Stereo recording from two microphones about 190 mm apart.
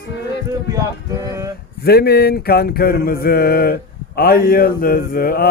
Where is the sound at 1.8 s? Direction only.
55° left (ahead or behind).